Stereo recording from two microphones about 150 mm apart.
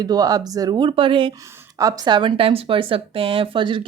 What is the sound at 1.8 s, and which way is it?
Speech, 25° right (ahead or behind).